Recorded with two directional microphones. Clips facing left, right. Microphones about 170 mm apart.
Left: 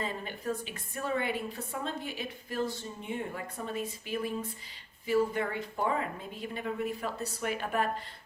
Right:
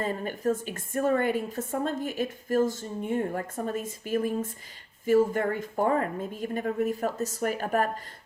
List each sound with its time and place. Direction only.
0.0 s a woman's voice: 45° right (ahead or behind)